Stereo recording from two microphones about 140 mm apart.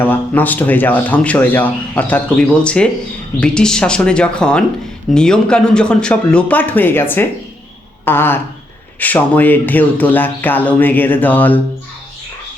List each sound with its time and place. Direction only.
0.0 s speech: 15° left (ahead or behind)